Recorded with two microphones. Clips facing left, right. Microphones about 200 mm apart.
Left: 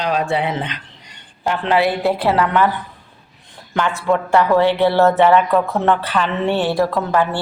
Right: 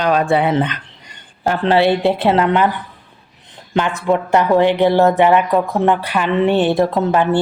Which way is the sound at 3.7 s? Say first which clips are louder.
Right 2 dB; 20° right (ahead or behind).